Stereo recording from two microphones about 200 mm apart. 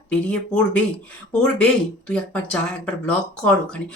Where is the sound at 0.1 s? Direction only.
5° left (ahead or behind).